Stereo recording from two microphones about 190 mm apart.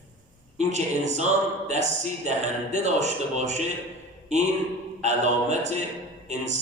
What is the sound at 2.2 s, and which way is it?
A man's voice, 35° right (ahead or behind).